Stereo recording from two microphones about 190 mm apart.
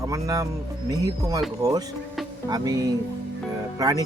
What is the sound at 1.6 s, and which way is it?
Speech, 20° right (ahead or behind).